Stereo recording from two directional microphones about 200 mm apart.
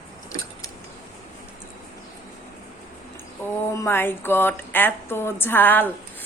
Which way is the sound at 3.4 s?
10° left (ahead or behind).